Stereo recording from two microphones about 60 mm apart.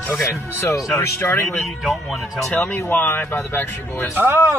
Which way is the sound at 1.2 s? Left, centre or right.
Left.